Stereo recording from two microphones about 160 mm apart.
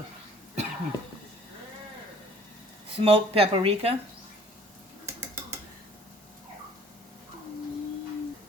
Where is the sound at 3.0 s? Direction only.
35° right (ahead or behind).